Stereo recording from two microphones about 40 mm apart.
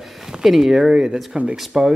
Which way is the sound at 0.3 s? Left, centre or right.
Centre.